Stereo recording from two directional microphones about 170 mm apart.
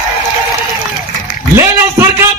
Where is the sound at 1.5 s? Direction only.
15° right (ahead or behind).